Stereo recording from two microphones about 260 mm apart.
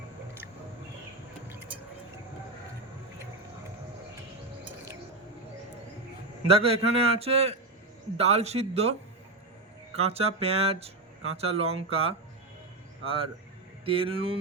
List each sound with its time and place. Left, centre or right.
1.5 s music: centre
6.5 s a man's voice: right